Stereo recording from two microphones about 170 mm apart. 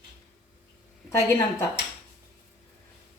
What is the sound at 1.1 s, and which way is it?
Speech, 15° left (ahead or behind).